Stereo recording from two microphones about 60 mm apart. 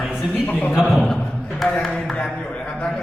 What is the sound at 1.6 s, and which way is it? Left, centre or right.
Speech, centre.